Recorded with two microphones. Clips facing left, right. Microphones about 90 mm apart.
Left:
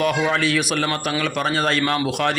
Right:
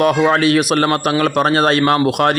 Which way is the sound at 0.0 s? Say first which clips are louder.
Right 7 dB; 55° right (ahead or behind).